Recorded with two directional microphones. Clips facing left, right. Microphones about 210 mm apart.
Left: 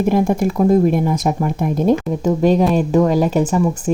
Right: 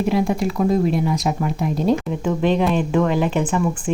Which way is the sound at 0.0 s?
50° left (ahead or behind).